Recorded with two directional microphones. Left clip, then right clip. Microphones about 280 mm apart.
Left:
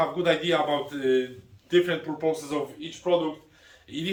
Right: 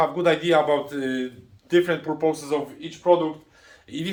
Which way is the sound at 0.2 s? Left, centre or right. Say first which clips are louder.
Right 4 dB; centre.